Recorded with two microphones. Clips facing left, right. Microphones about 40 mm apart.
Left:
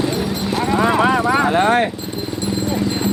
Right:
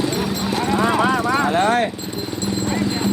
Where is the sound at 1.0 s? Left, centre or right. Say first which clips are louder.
Left 3 dB; left.